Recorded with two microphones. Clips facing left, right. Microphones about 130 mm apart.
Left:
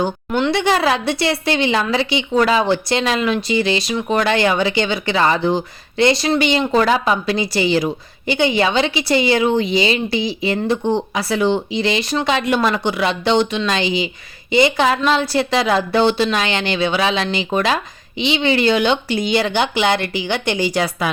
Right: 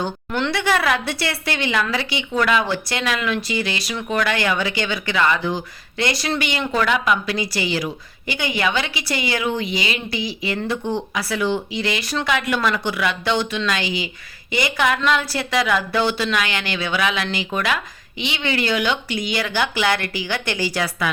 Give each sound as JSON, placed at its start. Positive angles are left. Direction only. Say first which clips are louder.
{"t": 0.0, "sound": "a woman's voice", "louder": "left 5 dB", "side_deg": 15}